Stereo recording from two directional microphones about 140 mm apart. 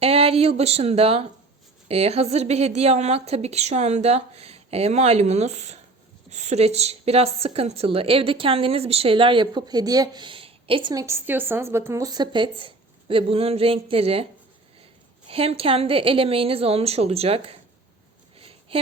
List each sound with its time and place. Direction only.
0.0 s a woman's voice: 45° right (ahead or behind)
10.9 s a woman's voice: 20° right (ahead or behind); by 14.3 s 45° right (ahead or behind)
15.3 s a woman's voice: 45° right (ahead or behind)
18.3 s a sound: 40° right (ahead or behind)